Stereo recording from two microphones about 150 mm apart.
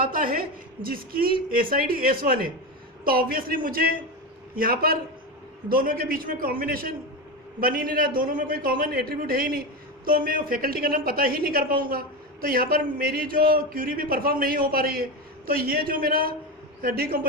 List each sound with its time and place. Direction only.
0.1 s a woman's voice: 75° right (ahead or behind)